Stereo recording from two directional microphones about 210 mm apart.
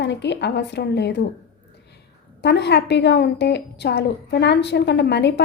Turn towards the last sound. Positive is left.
turn(degrees=55)  # may be behind; listen again after turning